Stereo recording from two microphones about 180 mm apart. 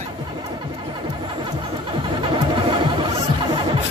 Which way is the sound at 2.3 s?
25° right (ahead or behind).